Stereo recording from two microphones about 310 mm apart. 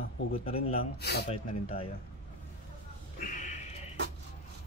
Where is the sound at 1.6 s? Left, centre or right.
Centre.